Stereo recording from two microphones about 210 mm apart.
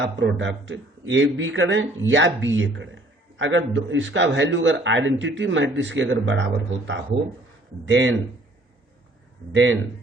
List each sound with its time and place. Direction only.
0.0 s speech: 60° right (ahead or behind)
9.5 s speech: 65° right (ahead or behind)